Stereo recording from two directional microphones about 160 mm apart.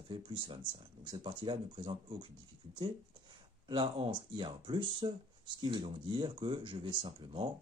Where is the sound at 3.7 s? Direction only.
30° right (ahead or behind).